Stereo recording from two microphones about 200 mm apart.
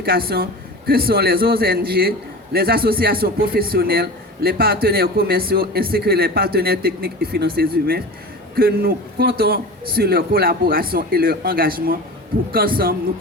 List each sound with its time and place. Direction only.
0.0 s a man's voice: 50° right (ahead or behind)